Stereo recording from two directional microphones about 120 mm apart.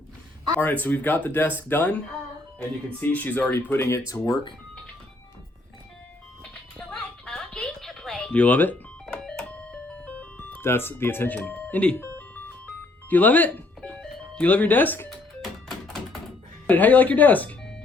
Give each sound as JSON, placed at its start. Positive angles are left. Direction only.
{"t": 0.6, "sound": "speech", "side_deg": 15}
{"t": 6.4, "sound": "a sound", "side_deg": 10}
{"t": 9.1, "sound": "music", "side_deg": 5}
{"t": 11.3, "sound": "speech", "side_deg": 10}
{"t": 12.3, "sound": "music", "side_deg": 15}
{"t": 15.1, "sound": "music", "side_deg": 5}
{"t": 16.6, "sound": "speech", "side_deg": 15}